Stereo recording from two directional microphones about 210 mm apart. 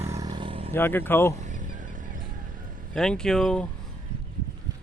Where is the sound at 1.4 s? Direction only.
35° right (ahead or behind).